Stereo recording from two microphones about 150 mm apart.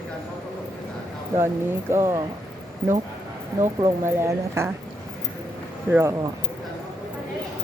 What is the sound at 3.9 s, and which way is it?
Speech, 15° right (ahead or behind).